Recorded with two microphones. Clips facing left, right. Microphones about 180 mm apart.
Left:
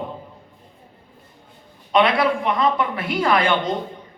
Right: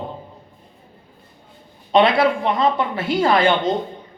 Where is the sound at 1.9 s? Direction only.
25° right (ahead or behind).